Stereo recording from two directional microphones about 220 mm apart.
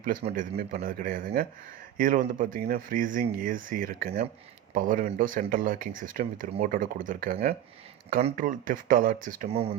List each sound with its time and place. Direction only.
0.0 s speech: 40° right (ahead or behind)